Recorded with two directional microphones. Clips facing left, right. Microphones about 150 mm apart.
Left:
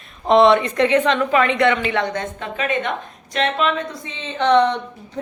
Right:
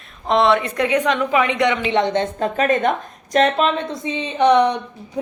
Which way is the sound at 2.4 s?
40° right (ahead or behind).